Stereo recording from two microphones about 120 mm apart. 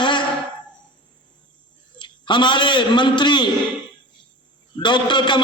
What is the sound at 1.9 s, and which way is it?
A man's voice, 40° left (ahead or behind).